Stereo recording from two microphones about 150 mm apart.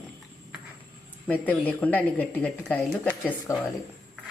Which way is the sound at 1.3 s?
10° left (ahead or behind).